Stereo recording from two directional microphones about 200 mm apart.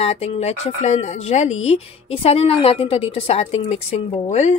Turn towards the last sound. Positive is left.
turn(degrees=30)  # may be behind; listen again after turning